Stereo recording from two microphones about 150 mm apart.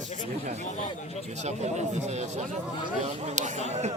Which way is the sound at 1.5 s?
50° right (ahead or behind).